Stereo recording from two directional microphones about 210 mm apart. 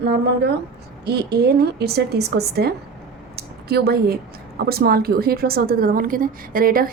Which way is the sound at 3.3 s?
50° right (ahead or behind).